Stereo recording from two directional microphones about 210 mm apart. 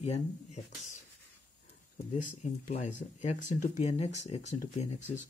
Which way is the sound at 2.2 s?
35° left (ahead or behind).